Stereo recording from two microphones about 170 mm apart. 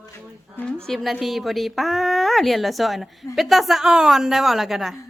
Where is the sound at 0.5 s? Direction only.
10° left (ahead or behind).